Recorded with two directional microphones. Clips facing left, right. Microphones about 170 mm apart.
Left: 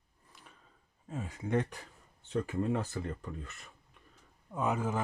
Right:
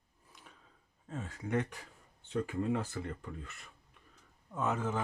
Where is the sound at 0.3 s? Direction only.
Centre (ahead or behind).